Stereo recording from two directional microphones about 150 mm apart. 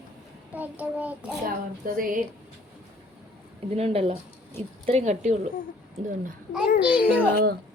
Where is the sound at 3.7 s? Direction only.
45° right (ahead or behind).